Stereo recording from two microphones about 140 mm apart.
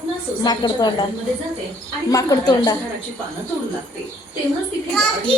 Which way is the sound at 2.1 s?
25° left (ahead or behind).